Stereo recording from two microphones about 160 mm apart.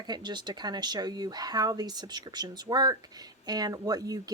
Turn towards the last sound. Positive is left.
turn(degrees=-25)  # may be behind; listen again after turning